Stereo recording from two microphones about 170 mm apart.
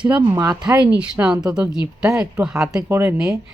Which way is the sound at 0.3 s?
20° right (ahead or behind).